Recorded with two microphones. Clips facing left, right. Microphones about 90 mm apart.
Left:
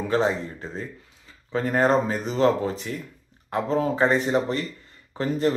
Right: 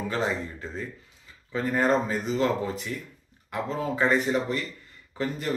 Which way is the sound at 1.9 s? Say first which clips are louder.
Left 2 dB; 40° left (ahead or behind).